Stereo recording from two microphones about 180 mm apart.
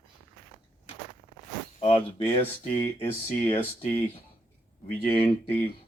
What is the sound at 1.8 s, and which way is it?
Speech, 30° left (ahead or behind).